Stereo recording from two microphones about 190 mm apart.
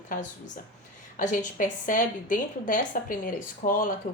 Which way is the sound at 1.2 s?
45° left (ahead or behind).